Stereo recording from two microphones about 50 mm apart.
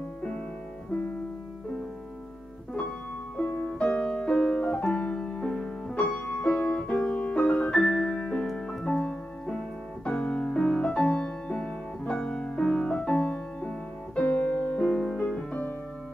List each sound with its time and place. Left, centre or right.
3.3 s music: left
8.5 s music: centre
8.8 s music: centre
10.0 s music: left
14.8 s music: centre
15.1 s music: left